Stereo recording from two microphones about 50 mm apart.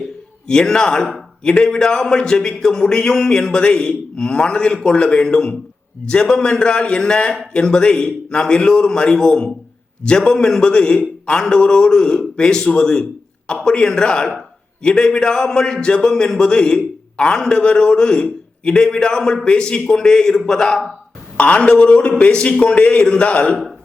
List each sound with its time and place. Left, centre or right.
0.4 s speech: centre
21.3 s a man's voice: left